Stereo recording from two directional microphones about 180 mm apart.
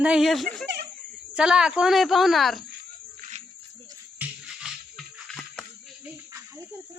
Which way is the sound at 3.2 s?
40° right (ahead or behind).